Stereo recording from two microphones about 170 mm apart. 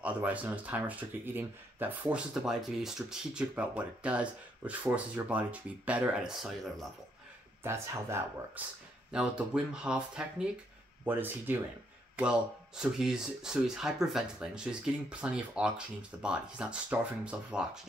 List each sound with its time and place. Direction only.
0.0 s speech: 10° right (ahead or behind)
7.6 s speech: 15° right (ahead or behind)